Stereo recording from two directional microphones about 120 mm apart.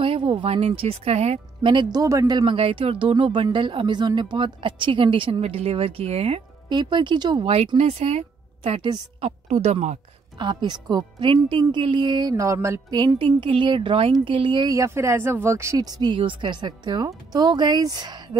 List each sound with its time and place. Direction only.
0.0 s speech: 45° right (ahead or behind)
1.7 s speech: 40° right (ahead or behind)
2.5 s a woman's voice: 50° right (ahead or behind)
6.7 s a woman's voice: 40° right (ahead or behind)
9.2 s speech: 70° right (ahead or behind)
10.4 s speech: 40° right (ahead or behind); by 12.8 s 20° right (ahead or behind)
12.9 s a woman's voice: 40° right (ahead or behind)
14.7 s speech: 25° right (ahead or behind)